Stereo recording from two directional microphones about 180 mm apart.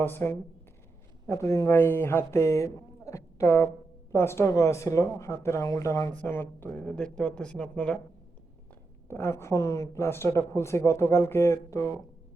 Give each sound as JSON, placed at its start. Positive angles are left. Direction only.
{"t": 0.0, "sound": "a woman's voice", "side_deg": 10}
{"t": 9.0, "sound": "a woman's voice", "side_deg": 15}